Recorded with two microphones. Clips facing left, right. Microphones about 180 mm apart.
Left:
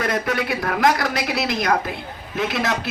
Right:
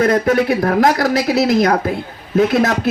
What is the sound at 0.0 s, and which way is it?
A man's voice, 50° right (ahead or behind).